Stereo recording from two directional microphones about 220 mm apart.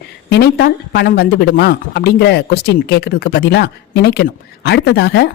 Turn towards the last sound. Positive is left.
turn(degrees=50)  # may be behind; listen again after turning